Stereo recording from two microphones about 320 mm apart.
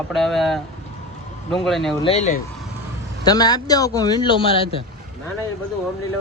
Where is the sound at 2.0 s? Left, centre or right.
Centre.